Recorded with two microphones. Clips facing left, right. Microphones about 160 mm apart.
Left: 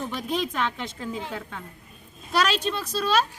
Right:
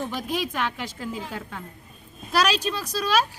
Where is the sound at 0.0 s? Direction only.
5° right (ahead or behind).